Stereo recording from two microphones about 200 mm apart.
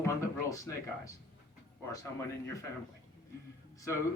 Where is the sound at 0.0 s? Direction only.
15° left (ahead or behind).